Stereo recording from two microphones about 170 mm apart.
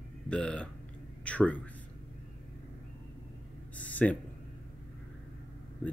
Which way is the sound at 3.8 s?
10° left (ahead or behind).